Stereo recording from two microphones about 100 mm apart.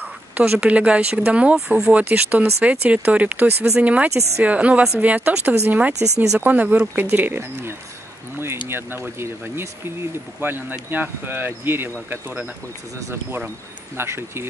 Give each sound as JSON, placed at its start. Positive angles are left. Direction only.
{"t": 0.3, "sound": "speech", "side_deg": -15}
{"t": 13.9, "sound": "speech", "side_deg": -25}